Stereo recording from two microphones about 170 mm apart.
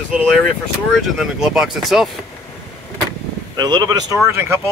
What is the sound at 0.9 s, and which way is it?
Speech, centre (ahead or behind).